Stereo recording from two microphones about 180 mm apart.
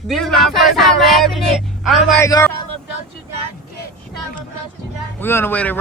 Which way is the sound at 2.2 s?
15° left (ahead or behind).